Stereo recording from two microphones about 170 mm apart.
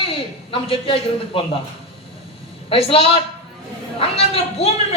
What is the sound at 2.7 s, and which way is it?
A man's voice, 35° left (ahead or behind).